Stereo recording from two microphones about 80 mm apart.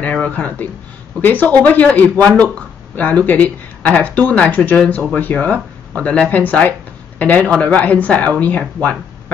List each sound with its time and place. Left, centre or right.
0.0 s speech: centre